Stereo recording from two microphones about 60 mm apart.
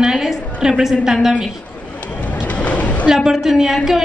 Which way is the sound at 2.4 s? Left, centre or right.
Left.